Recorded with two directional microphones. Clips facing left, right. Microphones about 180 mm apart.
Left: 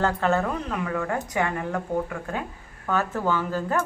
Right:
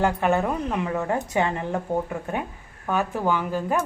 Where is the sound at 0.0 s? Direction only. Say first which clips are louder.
Right 1 dB; 15° right (ahead or behind).